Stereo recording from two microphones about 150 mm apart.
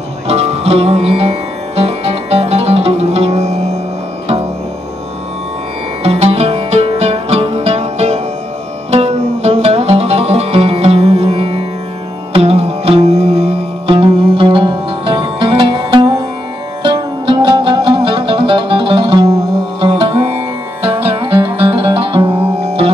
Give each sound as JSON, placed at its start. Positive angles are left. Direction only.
{"t": 0.3, "sound": "music", "side_deg": -45}
{"t": 6.0, "sound": "music", "side_deg": -45}
{"t": 19.9, "sound": "music", "side_deg": -45}
{"t": 21.7, "sound": "music", "side_deg": -40}